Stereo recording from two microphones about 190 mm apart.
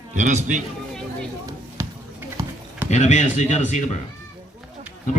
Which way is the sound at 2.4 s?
15° right (ahead or behind).